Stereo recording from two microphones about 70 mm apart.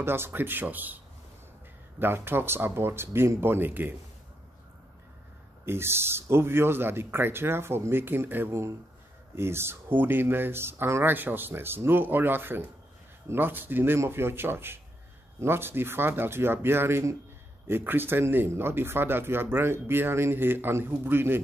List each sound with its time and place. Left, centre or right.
0.0 s speech: right
5.7 s speech: right